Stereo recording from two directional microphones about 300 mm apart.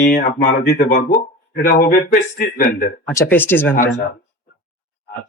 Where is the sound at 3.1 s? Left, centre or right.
Centre.